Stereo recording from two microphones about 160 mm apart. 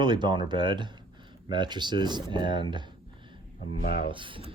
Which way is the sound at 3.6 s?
65° left (ahead or behind).